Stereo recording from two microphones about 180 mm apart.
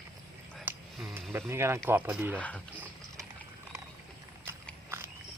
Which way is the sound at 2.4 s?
10° left (ahead or behind).